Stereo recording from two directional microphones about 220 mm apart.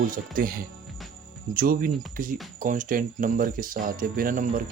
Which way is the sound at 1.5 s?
40° right (ahead or behind).